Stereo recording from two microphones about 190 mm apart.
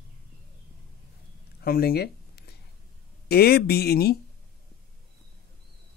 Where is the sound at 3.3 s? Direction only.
55° left (ahead or behind).